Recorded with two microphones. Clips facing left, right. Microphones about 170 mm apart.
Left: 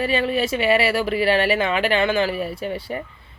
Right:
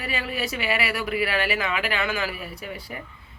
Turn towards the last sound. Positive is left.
turn(degrees=30)  # may be behind; listen again after turning